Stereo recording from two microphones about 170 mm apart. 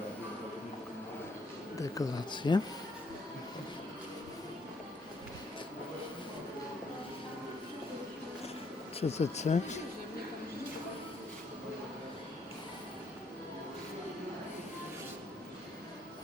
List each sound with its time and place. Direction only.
1.8 s speech: 25° left (ahead or behind)
9.0 s speech: 40° left (ahead or behind)